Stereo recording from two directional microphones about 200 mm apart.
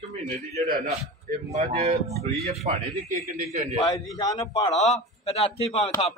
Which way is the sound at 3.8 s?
20° left (ahead or behind).